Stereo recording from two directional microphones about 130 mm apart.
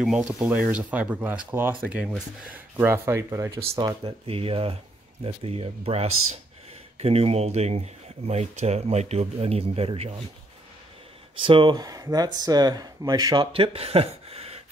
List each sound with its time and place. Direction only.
0.0 s speech: 5° right (ahead or behind); by 3.9 s 25° right (ahead or behind)
4.0 s speech: 45° right (ahead or behind)
11.4 s speech: 40° right (ahead or behind)
13.6 s speech: 50° right (ahead or behind)